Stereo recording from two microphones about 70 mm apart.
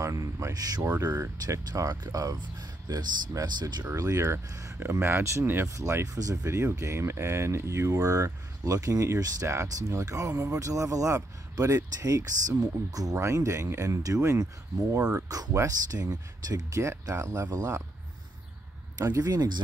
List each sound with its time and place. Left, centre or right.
0.0 s speech: right
3.9 s speech: right
4.7 s speech: right
13.1 s speech: right
16.7 s speech: right
19.0 s speech: right
19.3 s speech: right